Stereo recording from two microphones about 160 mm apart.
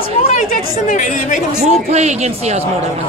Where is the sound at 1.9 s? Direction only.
45° right (ahead or behind).